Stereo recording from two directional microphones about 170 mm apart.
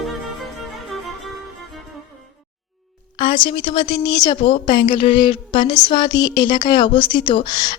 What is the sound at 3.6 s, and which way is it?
A woman's voice, 30° left (ahead or behind).